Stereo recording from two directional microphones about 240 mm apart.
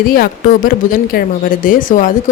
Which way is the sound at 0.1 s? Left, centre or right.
Left.